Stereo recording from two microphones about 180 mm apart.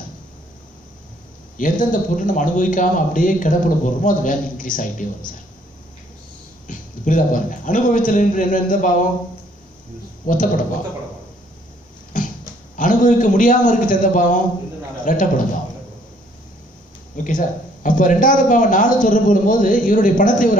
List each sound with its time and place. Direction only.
1.6 s a man's voice: 45° left (ahead or behind)
6.7 s a man's voice: 50° left (ahead or behind)
10.2 s a man's voice: 45° left (ahead or behind)
12.1 s pig: 45° left (ahead or behind)
12.7 s a man's voice: 45° left (ahead or behind)
17.1 s a man's voice: 45° left (ahead or behind)